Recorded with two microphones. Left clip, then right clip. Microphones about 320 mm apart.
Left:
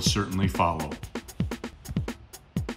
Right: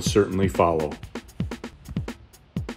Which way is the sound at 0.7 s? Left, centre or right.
Centre.